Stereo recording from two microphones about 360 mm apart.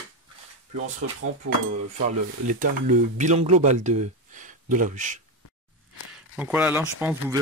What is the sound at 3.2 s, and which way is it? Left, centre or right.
Speech, centre.